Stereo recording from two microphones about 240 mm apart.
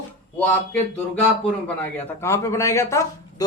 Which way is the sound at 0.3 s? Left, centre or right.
Centre.